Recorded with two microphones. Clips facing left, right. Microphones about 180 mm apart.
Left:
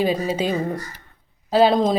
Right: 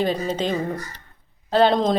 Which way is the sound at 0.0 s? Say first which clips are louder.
Left 2 dB; 10° left (ahead or behind).